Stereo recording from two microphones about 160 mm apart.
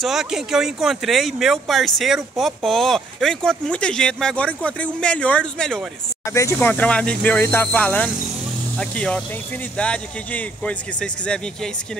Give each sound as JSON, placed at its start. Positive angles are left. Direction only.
{"t": 0.0, "sound": "speech", "side_deg": 0}
{"t": 6.3, "sound": "speech", "side_deg": 20}
{"t": 6.7, "sound": "speech", "side_deg": 5}